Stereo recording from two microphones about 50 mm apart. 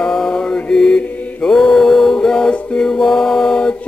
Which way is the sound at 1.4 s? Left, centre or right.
Centre.